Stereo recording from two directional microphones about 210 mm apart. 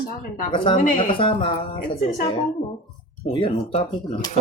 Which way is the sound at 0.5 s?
25° left (ahead or behind).